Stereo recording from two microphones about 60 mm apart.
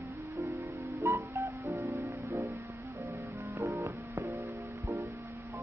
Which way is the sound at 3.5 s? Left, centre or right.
Right.